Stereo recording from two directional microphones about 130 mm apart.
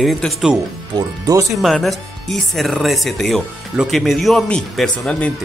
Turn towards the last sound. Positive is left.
turn(degrees=5)  # may be behind; listen again after turning